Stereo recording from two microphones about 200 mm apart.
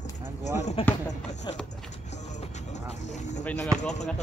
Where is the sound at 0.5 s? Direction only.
35° left (ahead or behind).